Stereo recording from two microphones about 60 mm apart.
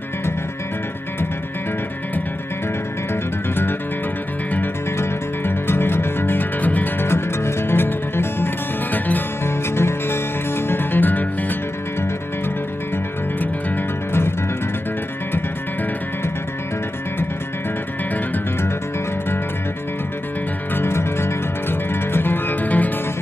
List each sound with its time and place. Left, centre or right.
3.1 s music: left
4.9 s music: left
7.1 s music: left
9.4 s music: left
12.9 s music: left
20.7 s music: left